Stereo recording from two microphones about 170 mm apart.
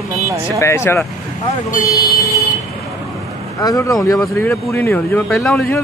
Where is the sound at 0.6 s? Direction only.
15° left (ahead or behind).